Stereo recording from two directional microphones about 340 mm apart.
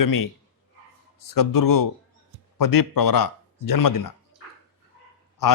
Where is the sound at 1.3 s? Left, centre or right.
Left.